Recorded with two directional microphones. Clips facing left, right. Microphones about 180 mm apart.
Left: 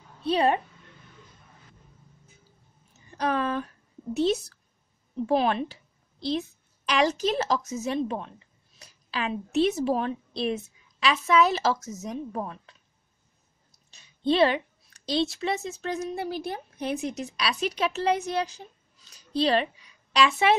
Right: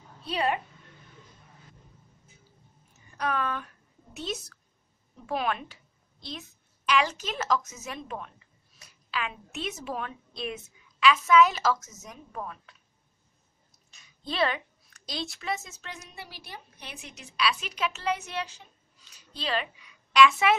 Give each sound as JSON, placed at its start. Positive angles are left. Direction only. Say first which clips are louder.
{"t": 0.3, "sound": "a woman's voice", "louder": "left 6 dB", "side_deg": 35}
{"t": 3.1, "sound": "a woman's voice", "louder": "left 4 dB", "side_deg": 30}
{"t": 13.8, "sound": "a sound", "louder": "left 14 dB", "side_deg": 30}
{"t": 15.0, "sound": "speech", "louder": "left 8 dB", "side_deg": 30}
{"t": 15.9, "sound": "a woman's voice", "louder": "left 15 dB", "side_deg": 50}